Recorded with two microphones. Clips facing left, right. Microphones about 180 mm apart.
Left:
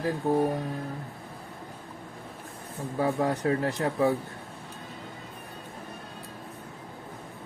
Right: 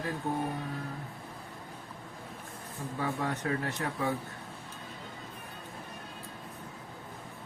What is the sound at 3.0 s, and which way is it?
Speech, 35° left (ahead or behind).